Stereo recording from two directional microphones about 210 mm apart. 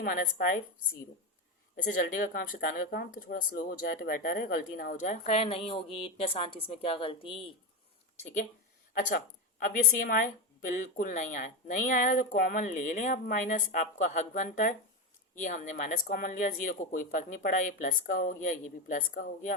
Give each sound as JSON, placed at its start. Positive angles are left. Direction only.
{"t": 0.0, "sound": "a woman's voice", "side_deg": 45}
{"t": 1.7, "sound": "a woman's voice", "side_deg": 40}
{"t": 9.0, "sound": "a woman's voice", "side_deg": 40}